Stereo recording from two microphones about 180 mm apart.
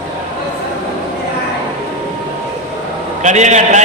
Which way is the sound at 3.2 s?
40° right (ahead or behind).